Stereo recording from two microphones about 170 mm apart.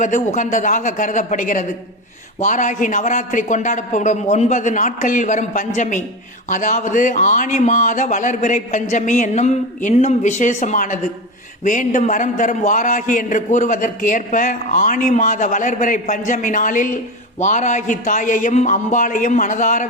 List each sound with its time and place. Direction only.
0.0 s a man's voice: 45° left (ahead or behind)